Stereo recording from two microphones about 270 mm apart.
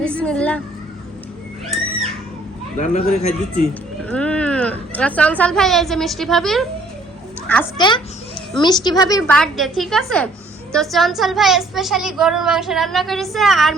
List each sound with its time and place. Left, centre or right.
0.0 s a sound: centre
2.7 s speech: left
4.1 s a woman's voice: centre
7.8 s a child's voice: centre